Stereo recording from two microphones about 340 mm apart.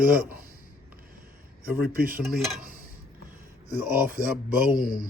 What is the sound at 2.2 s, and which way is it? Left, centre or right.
Speech, centre.